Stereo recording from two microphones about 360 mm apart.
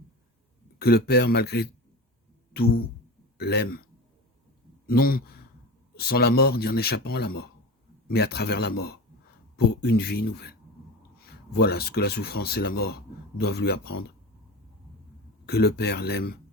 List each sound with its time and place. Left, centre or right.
0.8 s speech: left
4.9 s speech: left
15.4 s speech: left